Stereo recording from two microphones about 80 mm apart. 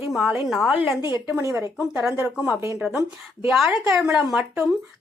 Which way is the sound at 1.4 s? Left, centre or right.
Right.